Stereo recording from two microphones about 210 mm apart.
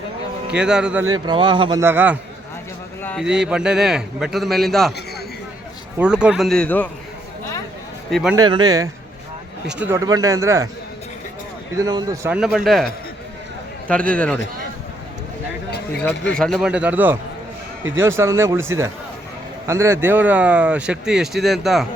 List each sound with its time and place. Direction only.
0.5 s speech: 5° right (ahead or behind)
1.0 s speech: 20° right (ahead or behind)
1.8 s speech: 10° right (ahead or behind)
3.0 s a sound: 5° left (ahead or behind)
3.2 s speech: 5° right (ahead or behind)
6.0 s speech: 5° right (ahead or behind)
8.1 s speech: centre (ahead or behind)
8.4 s speech: 20° right (ahead or behind)
9.6 s speech: 5° right (ahead or behind)
11.8 s speech: 15° right (ahead or behind)
12.4 s speech: 5° right (ahead or behind)
16.3 s speech: 5° left (ahead or behind)